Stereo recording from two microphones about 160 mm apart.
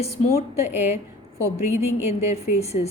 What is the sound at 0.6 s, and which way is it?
Speech, 45° left (ahead or behind).